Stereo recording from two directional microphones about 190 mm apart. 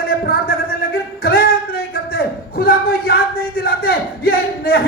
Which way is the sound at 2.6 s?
50° left (ahead or behind).